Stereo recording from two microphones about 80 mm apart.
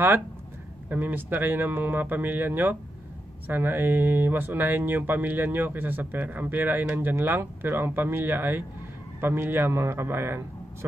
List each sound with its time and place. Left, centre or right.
0.8 s speech: right